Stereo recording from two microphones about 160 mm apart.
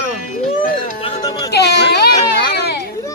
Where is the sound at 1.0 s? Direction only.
25° left (ahead or behind).